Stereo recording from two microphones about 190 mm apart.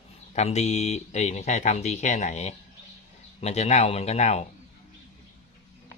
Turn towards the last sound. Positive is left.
turn(degrees=35)  # may be behind; listen again after turning